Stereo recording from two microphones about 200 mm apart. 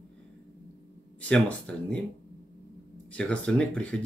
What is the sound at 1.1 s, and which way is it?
Speech, 5° left (ahead or behind).